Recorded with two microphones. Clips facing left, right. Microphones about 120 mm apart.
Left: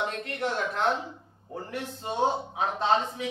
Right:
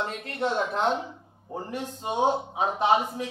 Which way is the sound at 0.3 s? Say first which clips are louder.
Right 3 dB; 20° right (ahead or behind).